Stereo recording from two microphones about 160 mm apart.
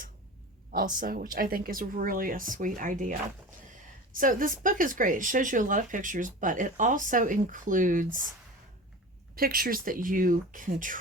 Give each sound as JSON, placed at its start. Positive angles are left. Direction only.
{"t": 0.9, "sound": "speech", "side_deg": -65}
{"t": 4.2, "sound": "speech", "side_deg": -60}
{"t": 9.3, "sound": "speech", "side_deg": -65}